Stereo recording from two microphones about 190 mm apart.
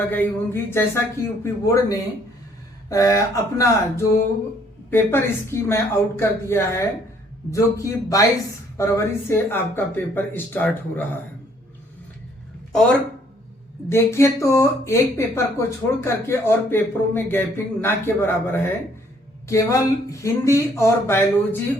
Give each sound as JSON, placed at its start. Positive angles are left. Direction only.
{"t": 0.1, "sound": "speech", "side_deg": 10}
{"t": 9.3, "sound": "speech", "side_deg": 10}
{"t": 13.9, "sound": "speech", "side_deg": 15}